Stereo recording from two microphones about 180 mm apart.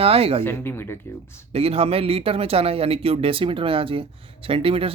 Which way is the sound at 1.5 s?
35° right (ahead or behind).